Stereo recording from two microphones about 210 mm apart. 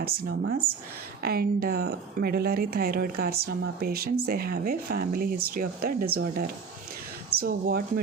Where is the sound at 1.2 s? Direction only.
45° right (ahead or behind).